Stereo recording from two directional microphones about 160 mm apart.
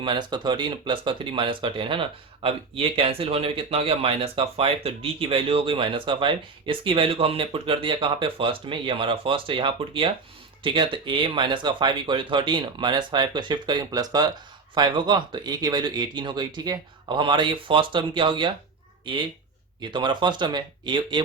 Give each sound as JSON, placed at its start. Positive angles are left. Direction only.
{"t": 0.0, "sound": "speech", "side_deg": -30}